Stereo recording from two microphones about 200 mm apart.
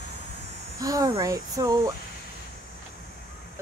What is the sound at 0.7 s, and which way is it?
Speech, 15° right (ahead or behind).